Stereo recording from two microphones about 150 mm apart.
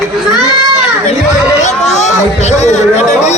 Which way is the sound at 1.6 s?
50° left (ahead or behind).